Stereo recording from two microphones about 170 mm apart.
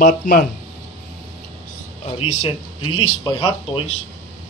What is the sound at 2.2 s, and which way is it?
Speech, 35° left (ahead or behind).